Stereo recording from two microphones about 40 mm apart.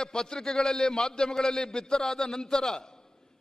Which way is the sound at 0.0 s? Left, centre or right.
Centre.